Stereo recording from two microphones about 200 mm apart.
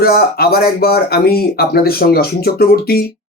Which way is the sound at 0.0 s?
50° left (ahead or behind).